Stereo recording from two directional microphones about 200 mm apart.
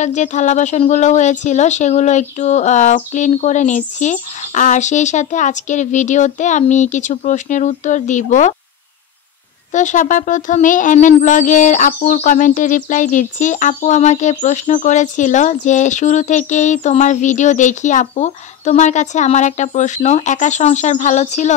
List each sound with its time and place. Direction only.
0.0 s speech: 35° left (ahead or behind)
9.7 s speech: 40° left (ahead or behind)